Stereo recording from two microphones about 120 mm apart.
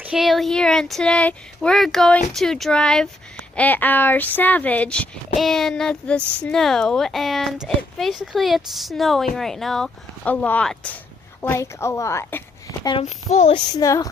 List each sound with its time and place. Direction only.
0.0 s speech: 5° right (ahead or behind)
11.4 s a woman's voice: 20° left (ahead or behind)
13.5 s a woman's voice: 35° left (ahead or behind)